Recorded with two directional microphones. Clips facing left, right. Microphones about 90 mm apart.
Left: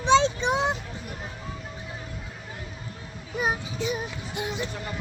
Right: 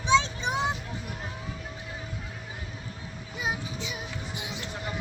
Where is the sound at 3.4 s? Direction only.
55° left (ahead or behind).